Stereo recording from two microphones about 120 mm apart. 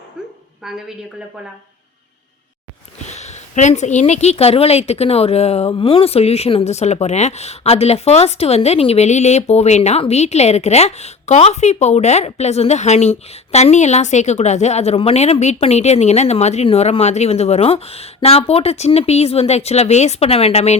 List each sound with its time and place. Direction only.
0.6 s a woman's voice: 5° right (ahead or behind)
3.1 s a woman's voice: 75° left (ahead or behind)